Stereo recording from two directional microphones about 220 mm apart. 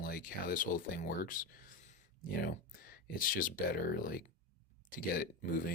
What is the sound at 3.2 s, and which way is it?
Speech, 40° left (ahead or behind).